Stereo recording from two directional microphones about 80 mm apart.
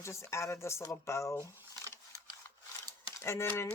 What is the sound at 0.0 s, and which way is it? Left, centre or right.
Speech, left.